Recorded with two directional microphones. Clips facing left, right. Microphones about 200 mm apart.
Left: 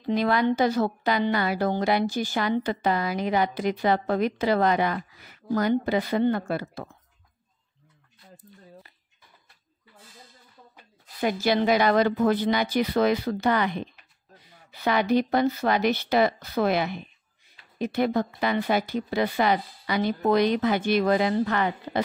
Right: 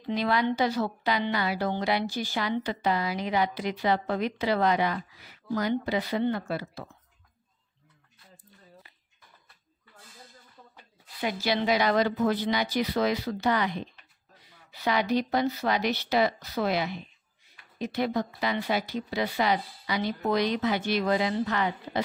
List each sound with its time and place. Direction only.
0.0 s a woman's voice: 50° left (ahead or behind)
11.1 s a woman's voice: 45° left (ahead or behind)